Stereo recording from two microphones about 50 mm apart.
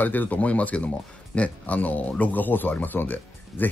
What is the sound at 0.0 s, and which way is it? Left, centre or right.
Speech, left.